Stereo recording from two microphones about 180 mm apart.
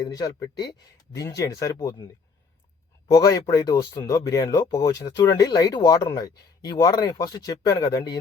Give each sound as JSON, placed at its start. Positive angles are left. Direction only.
{"t": 0.0, "sound": "speech", "side_deg": 20}
{"t": 3.1, "sound": "speech", "side_deg": 20}